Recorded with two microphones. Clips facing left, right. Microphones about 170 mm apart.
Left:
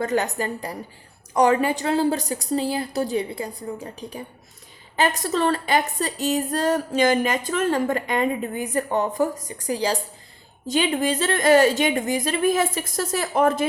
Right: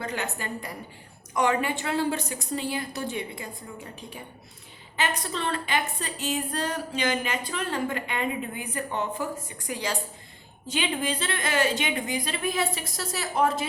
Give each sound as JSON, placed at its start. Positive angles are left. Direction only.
{"t": 0.0, "sound": "a woman's voice", "side_deg": 40}